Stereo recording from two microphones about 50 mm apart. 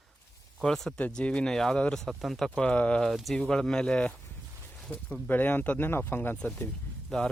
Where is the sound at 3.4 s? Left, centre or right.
Centre.